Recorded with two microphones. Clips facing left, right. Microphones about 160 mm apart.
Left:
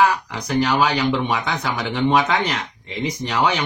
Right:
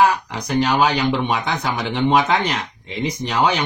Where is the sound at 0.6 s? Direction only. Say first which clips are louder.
Right 1 dB; 20° right (ahead or behind).